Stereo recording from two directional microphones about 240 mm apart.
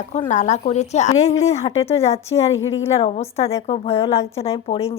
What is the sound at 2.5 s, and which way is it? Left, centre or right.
Speech, left.